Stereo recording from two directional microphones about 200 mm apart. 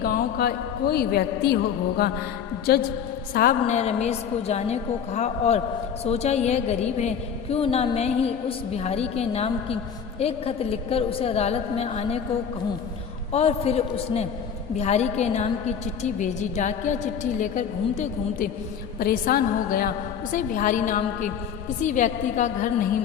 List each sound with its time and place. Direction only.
0.0 s a woman's voice: 50° left (ahead or behind)
3.3 s a woman's voice: 40° left (ahead or behind)
13.3 s a woman's voice: 30° left (ahead or behind)